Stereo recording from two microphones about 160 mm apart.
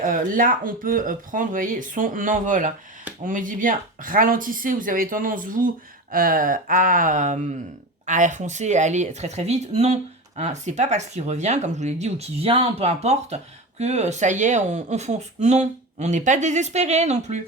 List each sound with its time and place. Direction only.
0.0 s speech: 55° right (ahead or behind)